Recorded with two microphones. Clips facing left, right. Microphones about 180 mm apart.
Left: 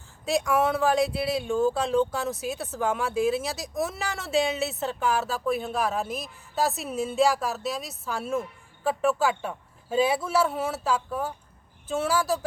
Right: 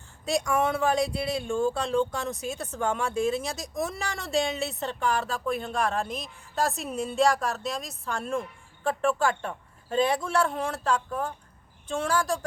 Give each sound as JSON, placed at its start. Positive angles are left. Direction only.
{"t": 0.3, "sound": "speech", "side_deg": 0}